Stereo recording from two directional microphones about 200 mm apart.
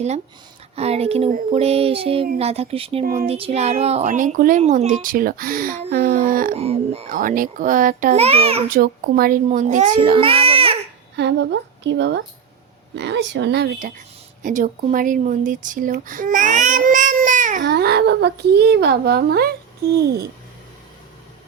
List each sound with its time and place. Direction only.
0.8 s speech: 30° right (ahead or behind)
1.5 s child singing: 30° right (ahead or behind)
3.0 s a child's voice: 45° right (ahead or behind)
3.2 s speech: 30° right (ahead or behind); by 6.6 s 45° right (ahead or behind)
6.6 s speech: 30° right (ahead or behind)
7.1 s a child's voice: 45° right (ahead or behind)
8.7 s speech: 45° right (ahead or behind)
10.2 s baby cry: 30° right (ahead or behind)
11.2 s a woman's voice: 60° right (ahead or behind)
14.4 s speech: 40° right (ahead or behind)
17.6 s a child's voice: 55° right (ahead or behind)